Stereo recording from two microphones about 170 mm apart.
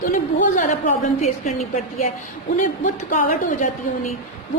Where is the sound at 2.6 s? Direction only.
50° left (ahead or behind).